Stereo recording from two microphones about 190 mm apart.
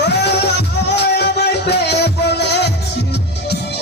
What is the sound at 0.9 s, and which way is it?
Music, 60° left (ahead or behind).